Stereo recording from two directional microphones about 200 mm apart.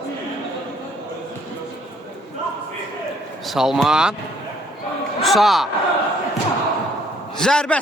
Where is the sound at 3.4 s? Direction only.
Centre (ahead or behind).